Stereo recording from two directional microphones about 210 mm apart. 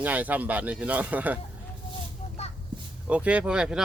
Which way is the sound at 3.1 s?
5° right (ahead or behind).